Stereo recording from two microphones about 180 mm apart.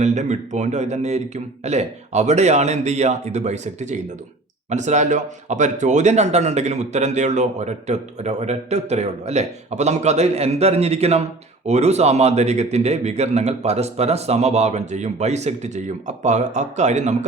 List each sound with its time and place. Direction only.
0.0 s speech: 40° right (ahead or behind)